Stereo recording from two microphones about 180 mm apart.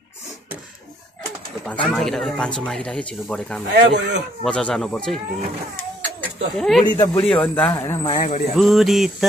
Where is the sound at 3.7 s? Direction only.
75° right (ahead or behind).